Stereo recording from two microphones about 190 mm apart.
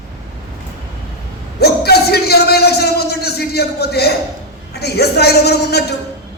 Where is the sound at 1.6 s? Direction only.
55° left (ahead or behind).